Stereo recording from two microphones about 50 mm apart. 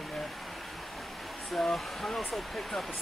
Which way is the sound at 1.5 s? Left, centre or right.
Centre.